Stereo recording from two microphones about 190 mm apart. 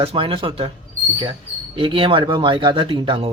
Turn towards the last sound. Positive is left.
turn(degrees=-25)  # may be behind; listen again after turning